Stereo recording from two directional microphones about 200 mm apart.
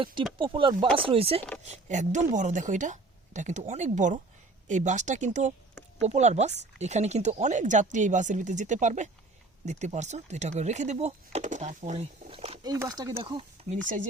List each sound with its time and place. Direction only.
0.0 s speech: 25° right (ahead or behind)
12.7 s speech: 15° right (ahead or behind)